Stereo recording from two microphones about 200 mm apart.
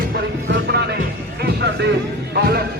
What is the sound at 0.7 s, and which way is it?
A man's voice, 55° right (ahead or behind).